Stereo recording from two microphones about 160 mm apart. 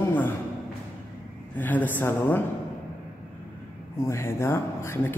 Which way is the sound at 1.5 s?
10° left (ahead or behind).